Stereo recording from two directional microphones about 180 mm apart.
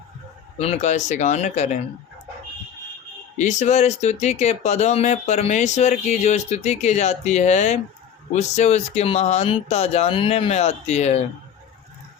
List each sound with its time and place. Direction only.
0.6 s speech: 40° left (ahead or behind)
3.3 s speech: 40° left (ahead or behind)